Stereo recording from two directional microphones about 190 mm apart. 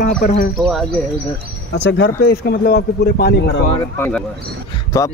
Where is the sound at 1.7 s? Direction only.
65° left (ahead or behind).